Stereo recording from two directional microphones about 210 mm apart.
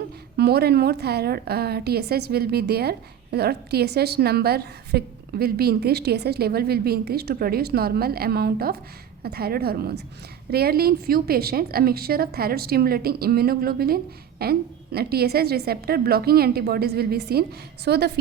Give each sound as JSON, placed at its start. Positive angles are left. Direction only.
{"t": 0.3, "sound": "a woman's voice", "side_deg": -50}